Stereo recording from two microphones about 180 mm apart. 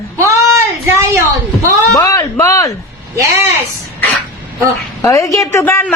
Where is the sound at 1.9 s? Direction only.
20° left (ahead or behind).